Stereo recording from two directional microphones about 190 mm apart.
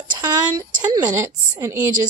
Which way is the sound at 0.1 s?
20° right (ahead or behind).